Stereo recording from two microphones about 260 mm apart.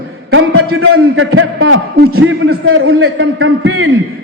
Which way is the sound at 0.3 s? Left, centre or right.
Right.